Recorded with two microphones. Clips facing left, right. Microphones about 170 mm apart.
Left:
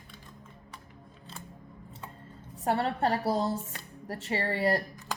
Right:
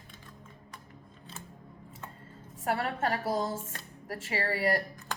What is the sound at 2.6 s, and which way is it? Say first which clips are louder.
A woman's voice: left 3 dB; 30° left (ahead or behind).